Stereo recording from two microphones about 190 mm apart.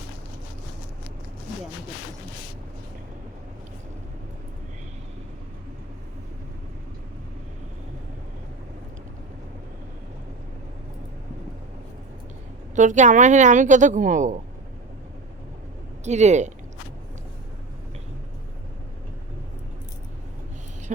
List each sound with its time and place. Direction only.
12.7 s a woman's voice: 40° right (ahead or behind)
16.0 s a woman's voice: 35° right (ahead or behind)